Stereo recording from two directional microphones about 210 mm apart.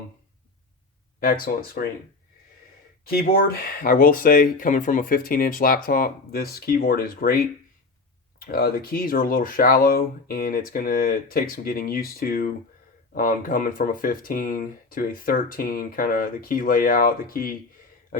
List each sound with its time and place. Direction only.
1.2 s speech: 45° left (ahead or behind)
3.1 s speech: 45° left (ahead or behind)
18.1 s a sound: 45° left (ahead or behind)